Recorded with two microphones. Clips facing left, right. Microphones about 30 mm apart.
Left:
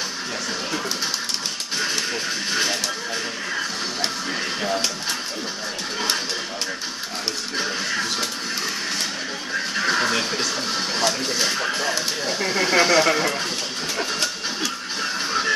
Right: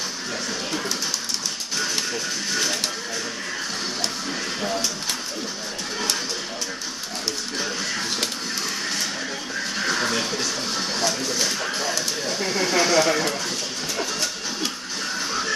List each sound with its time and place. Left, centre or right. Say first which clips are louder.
2.5 s music: left 2 dB; left
7.5 s music: left 5 dB; left
9.8 s television: left 2 dB; left
11.0 s music: left 3 dB; left
11.6 s a sound: left 2 dB; left
12.3 s speech: left 3 dB; left